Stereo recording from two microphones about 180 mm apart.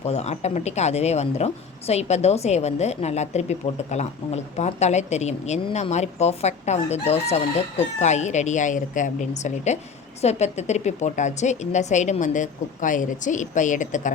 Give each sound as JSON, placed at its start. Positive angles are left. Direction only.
{"t": 0.0, "sound": "a woman's voice", "side_deg": 35}